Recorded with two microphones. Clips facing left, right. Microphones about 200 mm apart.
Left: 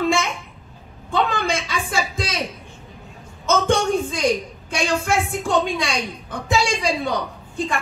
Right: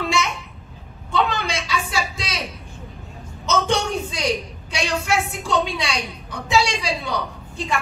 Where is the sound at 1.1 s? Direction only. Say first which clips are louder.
Left 1 dB; 50° left (ahead or behind).